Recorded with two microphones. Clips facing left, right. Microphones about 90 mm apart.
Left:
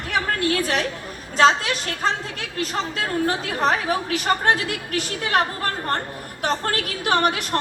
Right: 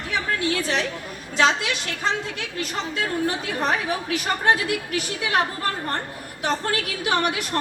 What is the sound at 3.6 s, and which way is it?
Speech, 35° left (ahead or behind).